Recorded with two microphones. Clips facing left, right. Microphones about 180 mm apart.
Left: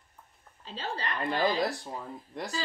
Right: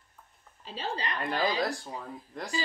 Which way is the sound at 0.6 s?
10° right (ahead or behind).